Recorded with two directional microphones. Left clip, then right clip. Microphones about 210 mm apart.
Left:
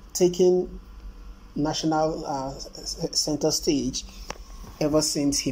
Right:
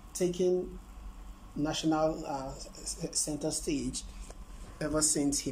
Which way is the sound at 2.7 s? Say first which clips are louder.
Left 8 dB; 15° right (ahead or behind).